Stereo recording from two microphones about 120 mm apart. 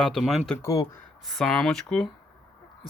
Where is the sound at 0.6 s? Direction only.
30° left (ahead or behind).